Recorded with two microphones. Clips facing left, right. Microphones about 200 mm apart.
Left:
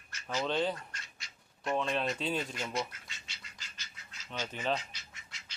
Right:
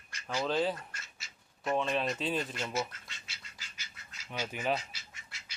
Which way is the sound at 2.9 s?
Centre (ahead or behind).